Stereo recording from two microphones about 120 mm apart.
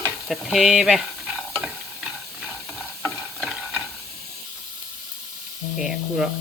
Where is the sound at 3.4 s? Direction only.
5° right (ahead or behind).